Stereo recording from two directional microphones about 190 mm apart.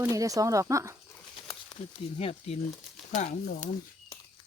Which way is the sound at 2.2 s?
30° left (ahead or behind).